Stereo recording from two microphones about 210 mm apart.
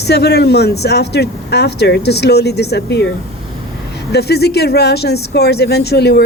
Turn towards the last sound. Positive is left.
turn(degrees=50)  # may be behind; listen again after turning